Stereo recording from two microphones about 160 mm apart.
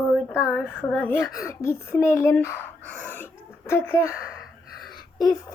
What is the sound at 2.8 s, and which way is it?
Throat clearing, 15° right (ahead or behind).